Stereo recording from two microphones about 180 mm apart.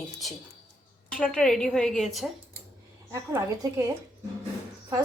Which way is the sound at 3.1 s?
15° right (ahead or behind).